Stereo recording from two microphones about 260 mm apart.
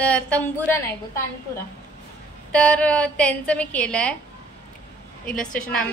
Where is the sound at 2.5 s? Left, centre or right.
Centre.